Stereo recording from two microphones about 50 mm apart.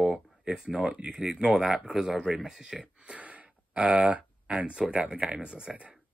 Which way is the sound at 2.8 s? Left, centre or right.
Right.